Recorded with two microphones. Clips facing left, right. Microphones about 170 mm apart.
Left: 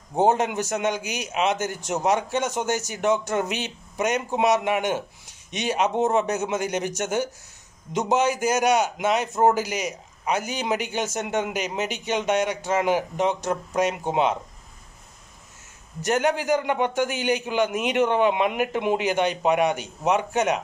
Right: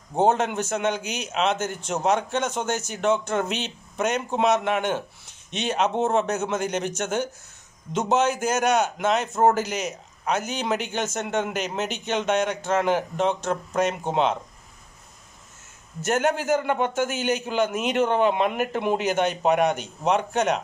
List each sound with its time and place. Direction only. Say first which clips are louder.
0.2 s a man's voice: even; 10° left (ahead or behind)
16.9 s a man's voice: left 1 dB; 15° left (ahead or behind)
18.9 s a man's voice: even; 45° right (ahead or behind)
19.7 s a man's voice: even; 10° left (ahead or behind)